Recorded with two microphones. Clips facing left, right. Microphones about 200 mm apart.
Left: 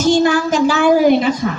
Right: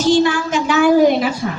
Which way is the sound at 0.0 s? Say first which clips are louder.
Left 1 dB; 45° left (ahead or behind).